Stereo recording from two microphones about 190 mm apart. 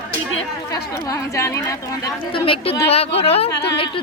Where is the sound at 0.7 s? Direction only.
15° left (ahead or behind).